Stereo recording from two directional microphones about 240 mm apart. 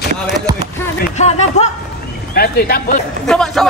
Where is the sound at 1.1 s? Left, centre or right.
Left.